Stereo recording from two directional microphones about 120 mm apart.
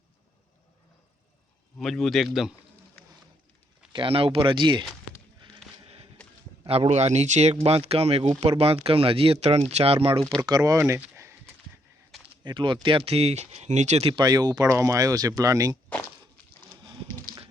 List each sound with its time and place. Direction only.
1.8 s speech: 5° left (ahead or behind)
3.9 s speech: 50° right (ahead or behind)
5.5 s a sound: 55° right (ahead or behind)
6.7 s speech: 55° right (ahead or behind)
7.5 s speech: 55° right (ahead or behind)
10.4 s speech: 35° right (ahead or behind)
11.1 s a sound: 25° right (ahead or behind)
12.5 s speech: 40° right (ahead or behind); by 14.0 s 70° right (ahead or behind)
14.0 s speech: 45° right (ahead or behind)
14.3 s speech: 35° right (ahead or behind)